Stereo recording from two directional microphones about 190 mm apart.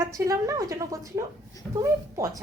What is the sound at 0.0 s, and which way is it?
A woman's voice, 15° right (ahead or behind).